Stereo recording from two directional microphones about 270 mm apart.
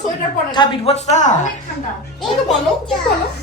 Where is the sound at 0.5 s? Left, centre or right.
Centre.